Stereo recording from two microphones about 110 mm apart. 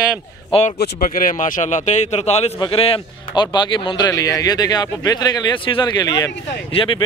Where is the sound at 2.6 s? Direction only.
50° left (ahead or behind).